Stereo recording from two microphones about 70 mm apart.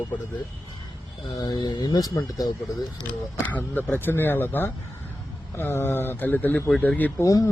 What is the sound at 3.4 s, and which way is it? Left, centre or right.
A man's voice, left.